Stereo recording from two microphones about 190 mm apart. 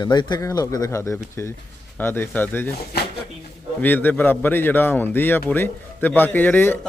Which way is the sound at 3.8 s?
10° left (ahead or behind).